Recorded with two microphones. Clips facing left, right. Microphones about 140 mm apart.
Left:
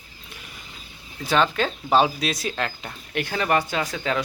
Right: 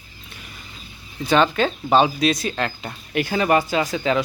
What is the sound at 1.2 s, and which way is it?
Speech, centre (ahead or behind).